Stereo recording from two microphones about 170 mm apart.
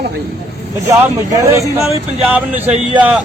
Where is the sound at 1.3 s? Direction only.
20° right (ahead or behind).